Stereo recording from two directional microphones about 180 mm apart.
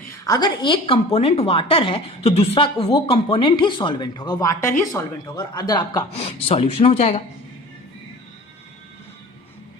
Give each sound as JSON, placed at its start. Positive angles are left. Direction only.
{"t": 0.1, "sound": "a woman's voice", "side_deg": 20}
{"t": 6.2, "sound": "speech", "side_deg": 35}